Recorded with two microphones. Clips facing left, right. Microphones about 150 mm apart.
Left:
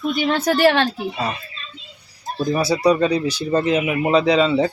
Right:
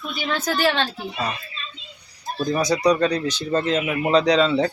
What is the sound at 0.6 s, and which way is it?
Speech, 70° left (ahead or behind).